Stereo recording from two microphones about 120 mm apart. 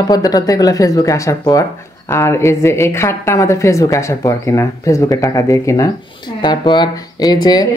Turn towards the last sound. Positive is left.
turn(degrees=35)  # may be behind; listen again after turning